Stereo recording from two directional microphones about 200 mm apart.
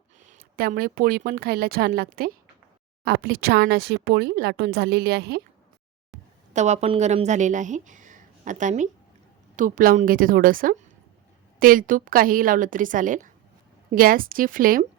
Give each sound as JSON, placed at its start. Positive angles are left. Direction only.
{"t": 0.3, "sound": "speech", "side_deg": -45}
{"t": 6.5, "sound": "a woman's voice", "side_deg": -35}